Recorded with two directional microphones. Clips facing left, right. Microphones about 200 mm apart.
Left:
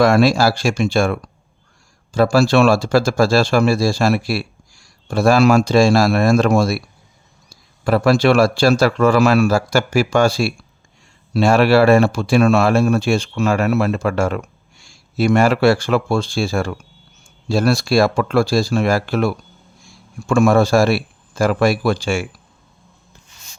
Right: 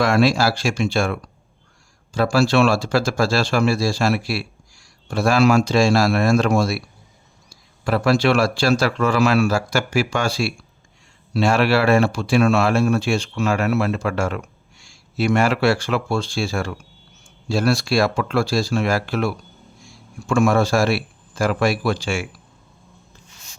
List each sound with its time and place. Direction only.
0.0 s a man's voice: 45° left (ahead or behind)
7.9 s a man's voice: 45° left (ahead or behind)